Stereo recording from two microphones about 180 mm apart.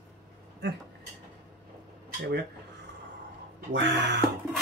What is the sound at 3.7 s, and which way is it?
Speech, 75° right (ahead or behind).